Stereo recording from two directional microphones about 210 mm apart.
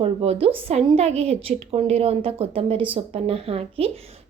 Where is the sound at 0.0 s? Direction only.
25° right (ahead or behind).